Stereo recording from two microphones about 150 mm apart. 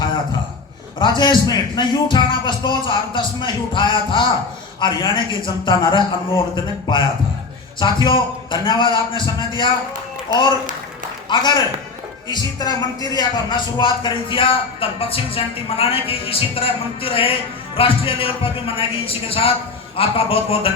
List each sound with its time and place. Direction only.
0.9 s speech: 30° left (ahead or behind)
11.3 s a man's voice: 30° left (ahead or behind)